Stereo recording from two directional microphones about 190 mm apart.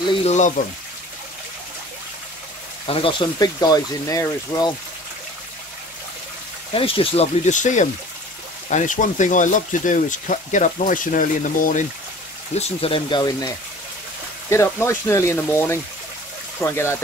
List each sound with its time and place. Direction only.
0.0 s a sound: 30° left (ahead or behind)
2.9 s speech: 25° left (ahead or behind)
6.7 s speech: 30° left (ahead or behind)
12.5 s speech: 30° left (ahead or behind)
14.5 s speech: 15° left (ahead or behind)